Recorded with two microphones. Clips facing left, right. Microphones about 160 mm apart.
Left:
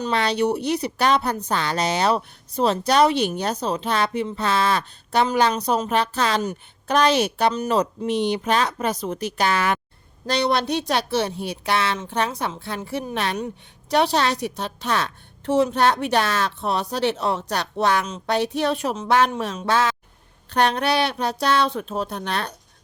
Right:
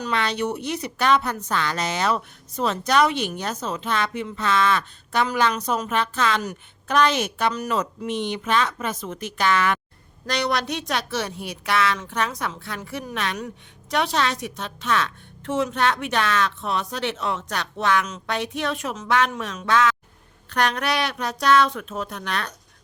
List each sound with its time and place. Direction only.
0.0 s a woman's voice: 35° left (ahead or behind)